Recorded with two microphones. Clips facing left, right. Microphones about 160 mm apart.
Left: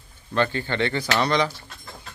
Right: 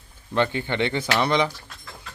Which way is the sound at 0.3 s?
20° right (ahead or behind).